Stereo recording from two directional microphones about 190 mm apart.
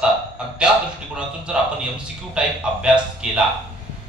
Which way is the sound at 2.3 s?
5° right (ahead or behind).